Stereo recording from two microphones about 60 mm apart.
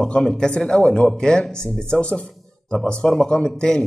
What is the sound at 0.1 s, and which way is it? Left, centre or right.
A man's voice, centre.